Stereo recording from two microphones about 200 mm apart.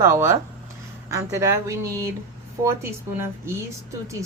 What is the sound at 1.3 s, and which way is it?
A woman's voice, 15° right (ahead or behind).